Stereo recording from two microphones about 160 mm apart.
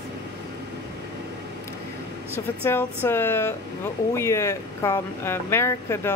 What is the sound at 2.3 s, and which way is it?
Speech, 15° left (ahead or behind).